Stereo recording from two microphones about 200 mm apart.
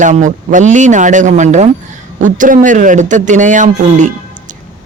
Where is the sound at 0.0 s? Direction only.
40° right (ahead or behind).